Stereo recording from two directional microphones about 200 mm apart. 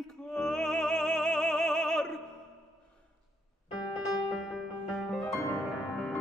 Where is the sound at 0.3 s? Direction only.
5° left (ahead or behind).